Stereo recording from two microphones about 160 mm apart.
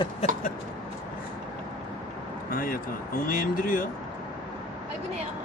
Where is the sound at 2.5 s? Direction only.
60° left (ahead or behind).